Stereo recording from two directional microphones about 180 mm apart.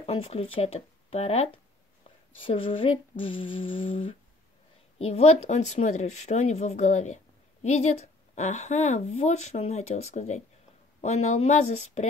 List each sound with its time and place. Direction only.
0.0 s speech: 35° left (ahead or behind)
2.3 s a sound: 30° left (ahead or behind)
4.9 s a woman's voice: 35° left (ahead or behind)